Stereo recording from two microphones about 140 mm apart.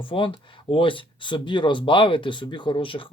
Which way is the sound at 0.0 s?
40° left (ahead or behind).